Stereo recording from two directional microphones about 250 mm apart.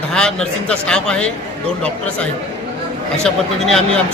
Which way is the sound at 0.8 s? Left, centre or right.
Centre.